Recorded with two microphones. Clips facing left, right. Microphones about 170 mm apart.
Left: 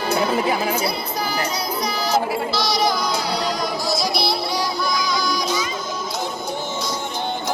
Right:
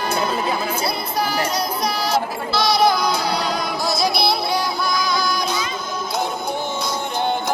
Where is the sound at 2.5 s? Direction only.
60° right (ahead or behind).